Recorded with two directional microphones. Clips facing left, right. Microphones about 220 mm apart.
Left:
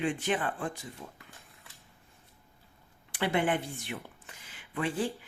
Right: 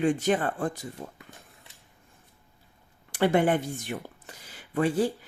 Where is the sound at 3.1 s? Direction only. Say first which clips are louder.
Right 6 dB; 45° right (ahead or behind).